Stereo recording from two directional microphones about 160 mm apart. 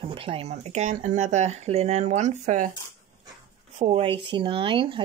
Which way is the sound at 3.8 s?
40° right (ahead or behind).